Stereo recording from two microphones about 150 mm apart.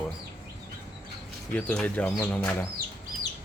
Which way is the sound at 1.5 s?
10° left (ahead or behind).